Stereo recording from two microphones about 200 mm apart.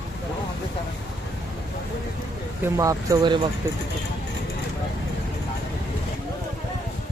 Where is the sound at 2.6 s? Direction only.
15° right (ahead or behind).